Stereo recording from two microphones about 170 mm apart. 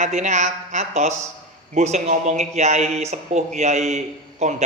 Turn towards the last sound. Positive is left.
turn(degrees=-40)  # may be behind; listen again after turning